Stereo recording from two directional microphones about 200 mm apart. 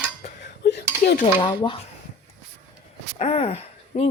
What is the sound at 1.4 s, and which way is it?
Speech, 20° left (ahead or behind).